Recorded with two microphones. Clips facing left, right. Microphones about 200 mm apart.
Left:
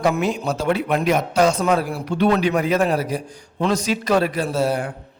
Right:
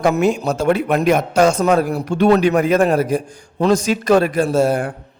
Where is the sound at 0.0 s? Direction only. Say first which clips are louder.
Right 4 dB; 50° right (ahead or behind).